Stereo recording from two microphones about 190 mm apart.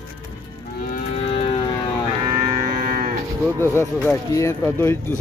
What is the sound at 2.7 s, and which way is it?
Moo, 50° right (ahead or behind).